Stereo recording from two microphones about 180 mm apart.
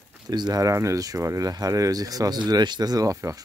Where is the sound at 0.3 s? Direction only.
20° right (ahead or behind).